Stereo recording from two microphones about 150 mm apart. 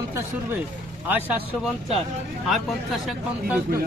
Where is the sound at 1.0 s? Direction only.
10° right (ahead or behind).